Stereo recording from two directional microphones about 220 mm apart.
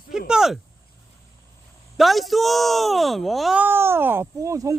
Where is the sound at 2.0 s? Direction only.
Centre (ahead or behind).